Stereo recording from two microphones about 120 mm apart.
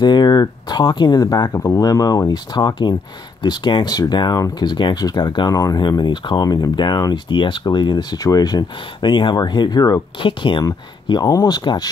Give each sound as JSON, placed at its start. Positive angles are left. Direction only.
{"t": 0.0, "sound": "speech", "side_deg": 35}